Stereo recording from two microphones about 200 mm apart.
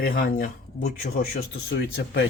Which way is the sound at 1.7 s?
55° left (ahead or behind).